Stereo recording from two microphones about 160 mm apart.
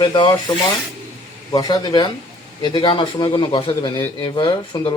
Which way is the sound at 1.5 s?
25° left (ahead or behind).